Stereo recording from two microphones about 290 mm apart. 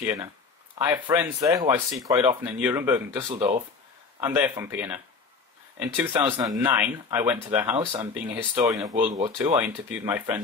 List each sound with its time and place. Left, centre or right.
0.0 s speech: centre